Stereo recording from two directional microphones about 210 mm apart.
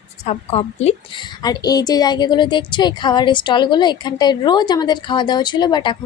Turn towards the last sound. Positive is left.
turn(degrees=20)  # may be behind; listen again after turning